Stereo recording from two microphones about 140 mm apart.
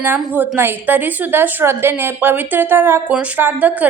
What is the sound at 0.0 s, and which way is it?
A woman's voice, 15° right (ahead or behind).